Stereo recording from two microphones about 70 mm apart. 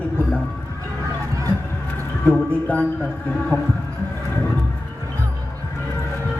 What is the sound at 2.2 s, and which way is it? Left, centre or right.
Speech, centre.